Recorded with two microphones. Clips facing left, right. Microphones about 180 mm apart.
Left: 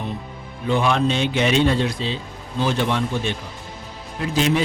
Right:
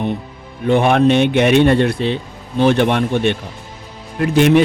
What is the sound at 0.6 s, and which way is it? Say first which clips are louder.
A man's voice: right 7 dB; 60° right (ahead or behind).